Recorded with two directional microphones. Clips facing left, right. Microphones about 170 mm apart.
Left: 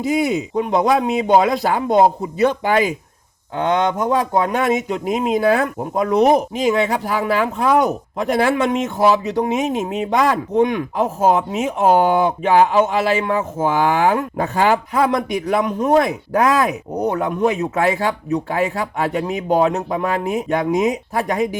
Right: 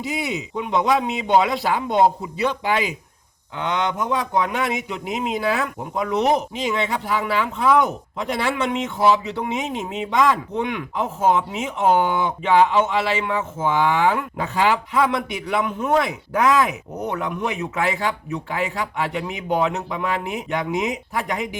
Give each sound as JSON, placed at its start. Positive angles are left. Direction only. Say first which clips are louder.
{"t": 0.0, "sound": "speech", "louder": "left 8 dB", "side_deg": 45}